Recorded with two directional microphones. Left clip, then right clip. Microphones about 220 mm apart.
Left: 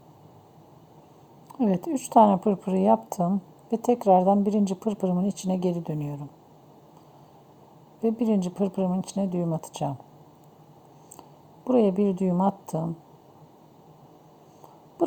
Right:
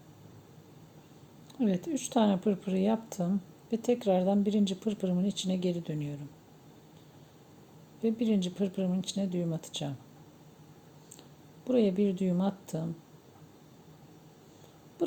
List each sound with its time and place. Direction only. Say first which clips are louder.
1.5 s a woman's voice: left 6 dB; 15° left (ahead or behind)
8.0 s a woman's voice: left 5 dB; 15° left (ahead or behind)
11.6 s a woman's voice: left 6 dB; 15° left (ahead or behind)